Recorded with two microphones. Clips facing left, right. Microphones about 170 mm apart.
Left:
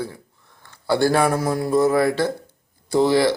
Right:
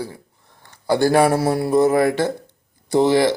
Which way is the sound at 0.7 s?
15° right (ahead or behind).